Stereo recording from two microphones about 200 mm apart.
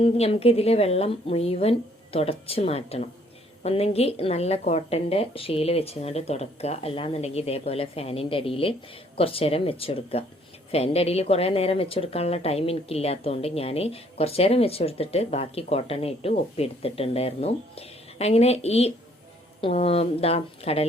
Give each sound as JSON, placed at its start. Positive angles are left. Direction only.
{"t": 0.0, "sound": "a woman's voice", "side_deg": 30}